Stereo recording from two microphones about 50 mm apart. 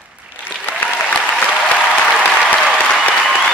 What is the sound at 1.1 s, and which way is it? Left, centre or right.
Applause, left.